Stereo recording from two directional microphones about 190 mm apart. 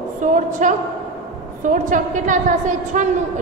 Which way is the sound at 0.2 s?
40° right (ahead or behind).